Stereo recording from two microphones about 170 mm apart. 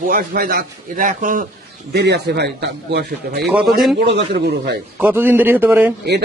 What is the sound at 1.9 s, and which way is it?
A man's voice, 80° right.